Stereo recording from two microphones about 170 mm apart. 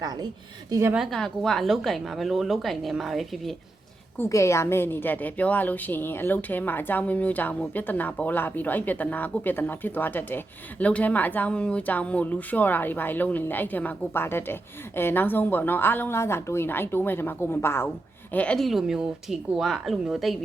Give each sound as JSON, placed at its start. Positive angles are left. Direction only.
{"t": 0.0, "sound": "a woman's voice", "side_deg": -25}
{"t": 0.9, "sound": "a woman's voice", "side_deg": 0}
{"t": 4.2, "sound": "a woman's voice", "side_deg": 15}